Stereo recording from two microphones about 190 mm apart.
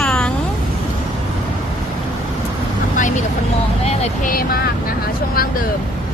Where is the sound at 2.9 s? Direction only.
40° left (ahead or behind).